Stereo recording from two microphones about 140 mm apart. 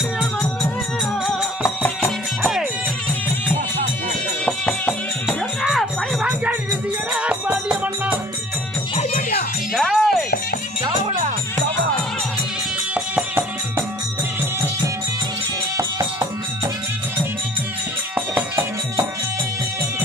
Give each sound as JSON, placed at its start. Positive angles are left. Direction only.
{"t": 1.2, "sound": "music", "side_deg": 0}
{"t": 4.5, "sound": "music", "side_deg": 10}
{"t": 9.8, "sound": "music", "side_deg": 0}
{"t": 12.9, "sound": "music", "side_deg": -10}
{"t": 15.8, "sound": "music", "side_deg": -25}
{"t": 18.3, "sound": "music", "side_deg": -15}